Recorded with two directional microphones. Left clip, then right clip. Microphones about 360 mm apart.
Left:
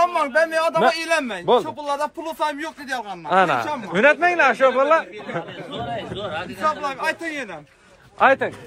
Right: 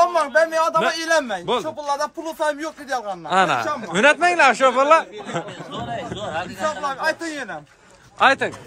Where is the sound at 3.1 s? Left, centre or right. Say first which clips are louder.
Left 1 dB; centre.